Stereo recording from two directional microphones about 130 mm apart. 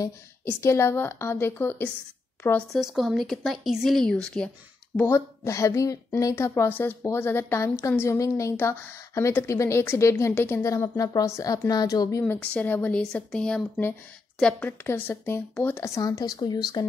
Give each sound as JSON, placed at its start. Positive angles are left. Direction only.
{"t": 0.5, "sound": "a woman's voice", "side_deg": 20}
{"t": 2.7, "sound": "speech", "side_deg": 0}
{"t": 4.9, "sound": "a woman's voice", "side_deg": 20}